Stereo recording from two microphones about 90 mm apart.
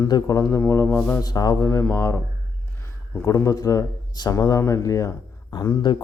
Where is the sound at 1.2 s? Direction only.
45° left (ahead or behind); by 2.2 s 25° left (ahead or behind).